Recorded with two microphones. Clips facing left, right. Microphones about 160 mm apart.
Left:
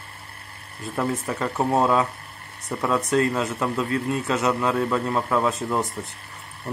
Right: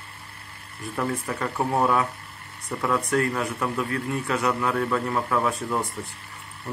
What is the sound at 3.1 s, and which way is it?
A man's voice, 20° left (ahead or behind).